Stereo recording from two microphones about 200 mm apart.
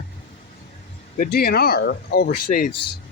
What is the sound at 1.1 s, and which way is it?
Speech, 50° left (ahead or behind).